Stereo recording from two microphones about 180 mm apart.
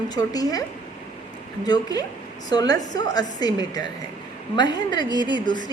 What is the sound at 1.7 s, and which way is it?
A woman's voice, 20° left (ahead or behind).